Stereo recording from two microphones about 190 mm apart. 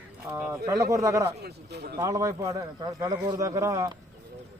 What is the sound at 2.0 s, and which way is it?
A man's voice, 15° right (ahead or behind).